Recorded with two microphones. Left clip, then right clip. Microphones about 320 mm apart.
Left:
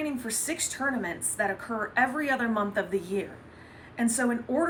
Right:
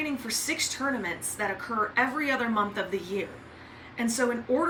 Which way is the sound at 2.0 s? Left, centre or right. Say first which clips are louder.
Left 3 dB; centre.